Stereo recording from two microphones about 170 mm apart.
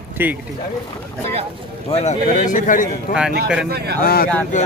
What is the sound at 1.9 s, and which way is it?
A man's voice, 45° left (ahead or behind).